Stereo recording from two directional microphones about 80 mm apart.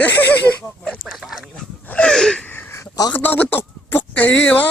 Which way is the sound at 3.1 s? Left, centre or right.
Left.